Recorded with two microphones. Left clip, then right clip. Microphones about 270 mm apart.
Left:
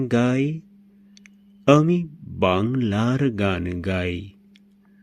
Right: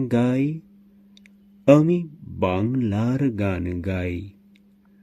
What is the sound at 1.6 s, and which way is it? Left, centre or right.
Speech, centre.